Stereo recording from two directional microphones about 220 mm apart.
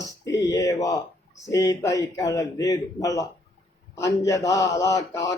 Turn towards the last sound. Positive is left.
turn(degrees=15)  # may be behind; listen again after turning